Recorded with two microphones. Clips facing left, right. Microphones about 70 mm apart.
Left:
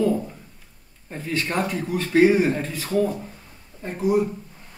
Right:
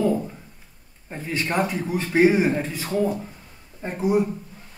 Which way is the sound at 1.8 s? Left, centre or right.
Right.